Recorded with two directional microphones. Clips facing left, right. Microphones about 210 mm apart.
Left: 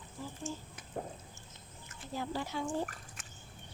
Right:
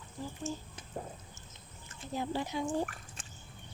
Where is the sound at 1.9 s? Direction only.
20° right (ahead or behind).